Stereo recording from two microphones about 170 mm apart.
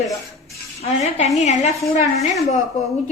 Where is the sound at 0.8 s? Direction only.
40° left (ahead or behind).